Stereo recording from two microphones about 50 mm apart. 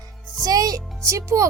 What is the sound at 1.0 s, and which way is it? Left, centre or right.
Speech, right.